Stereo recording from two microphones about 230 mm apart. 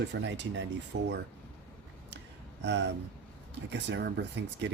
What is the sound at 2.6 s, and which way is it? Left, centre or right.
Speech, right.